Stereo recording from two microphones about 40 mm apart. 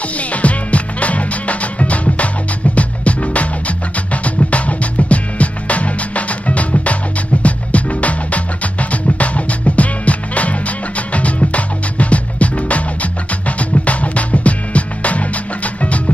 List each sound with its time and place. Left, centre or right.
0.3 s music: left